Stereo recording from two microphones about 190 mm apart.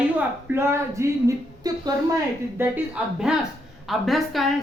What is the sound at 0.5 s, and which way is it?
Speech, 15° right (ahead or behind).